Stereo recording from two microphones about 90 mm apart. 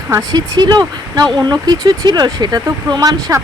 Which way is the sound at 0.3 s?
50° right (ahead or behind).